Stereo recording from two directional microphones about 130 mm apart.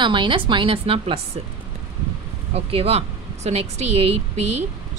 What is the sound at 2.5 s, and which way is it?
Speech, 50° right (ahead or behind).